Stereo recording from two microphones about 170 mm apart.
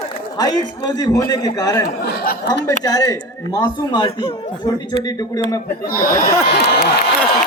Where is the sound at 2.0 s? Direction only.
65° left (ahead or behind).